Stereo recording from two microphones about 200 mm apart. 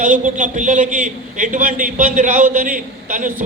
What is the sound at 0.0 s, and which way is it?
A man's voice, 40° right (ahead or behind).